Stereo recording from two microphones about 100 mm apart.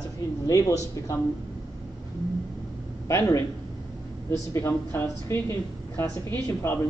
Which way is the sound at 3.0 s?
30° left (ahead or behind).